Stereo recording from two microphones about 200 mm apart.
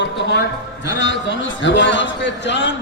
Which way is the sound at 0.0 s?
60° left (ahead or behind).